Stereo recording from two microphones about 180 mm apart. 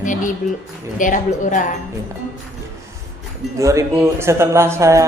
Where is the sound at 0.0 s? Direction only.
45° left (ahead or behind).